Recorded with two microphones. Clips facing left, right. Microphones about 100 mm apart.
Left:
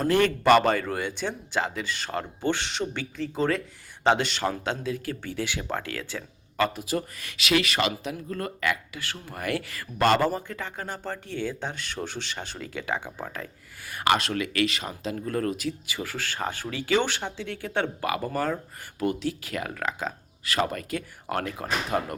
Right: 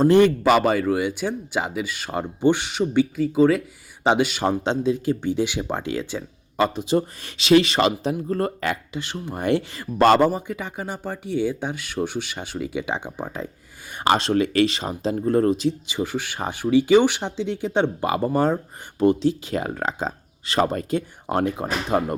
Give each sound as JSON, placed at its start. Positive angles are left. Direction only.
{"t": 0.0, "sound": "speech", "side_deg": -25}
{"t": 0.3, "sound": "speech", "side_deg": -5}
{"t": 4.6, "sound": "speech", "side_deg": -25}
{"t": 9.0, "sound": "speech", "side_deg": -20}
{"t": 10.2, "sound": "speech", "side_deg": -15}